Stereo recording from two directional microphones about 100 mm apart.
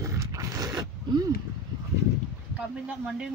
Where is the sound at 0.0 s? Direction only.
30° right (ahead or behind).